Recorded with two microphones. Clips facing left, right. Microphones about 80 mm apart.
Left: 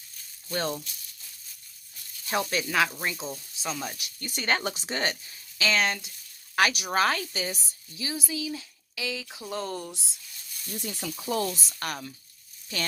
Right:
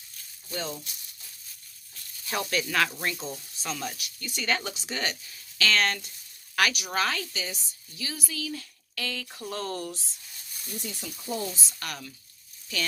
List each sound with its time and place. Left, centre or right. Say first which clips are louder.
0.5 s speech: left 4 dB; left
2.3 s speech: left 1 dB; left
4.0 s speech: left 1 dB; left
5.5 s speech: even; centre
6.6 s speech: left 3 dB; left
7.9 s speech: left 3 dB; left; by 10.0 s centre
10.7 s speech: left 3 dB; left
11.8 s speech: left 4 dB; left